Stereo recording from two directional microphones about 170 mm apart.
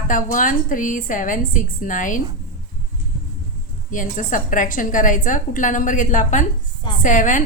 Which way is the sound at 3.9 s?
50° left (ahead or behind).